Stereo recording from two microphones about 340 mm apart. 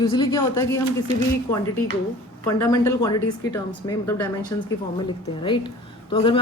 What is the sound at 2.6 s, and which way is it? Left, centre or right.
Speech, centre.